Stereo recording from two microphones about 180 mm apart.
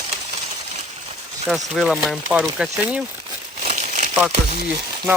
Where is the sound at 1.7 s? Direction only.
Centre (ahead or behind).